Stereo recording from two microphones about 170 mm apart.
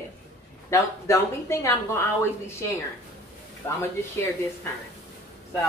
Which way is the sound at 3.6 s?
10° left (ahead or behind).